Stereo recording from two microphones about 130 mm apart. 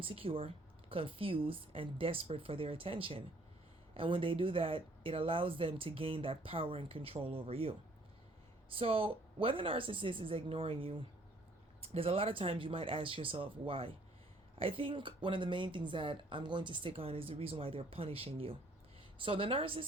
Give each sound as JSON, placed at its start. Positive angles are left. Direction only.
{"t": 0.0, "sound": "speech", "side_deg": -45}